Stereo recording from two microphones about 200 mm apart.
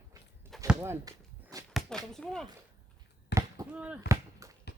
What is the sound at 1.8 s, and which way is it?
Speech, centre (ahead or behind).